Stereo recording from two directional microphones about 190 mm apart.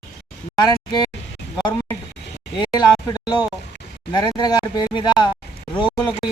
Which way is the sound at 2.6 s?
20° left (ahead or behind).